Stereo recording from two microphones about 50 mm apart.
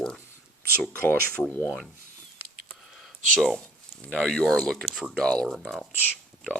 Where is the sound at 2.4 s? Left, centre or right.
Right.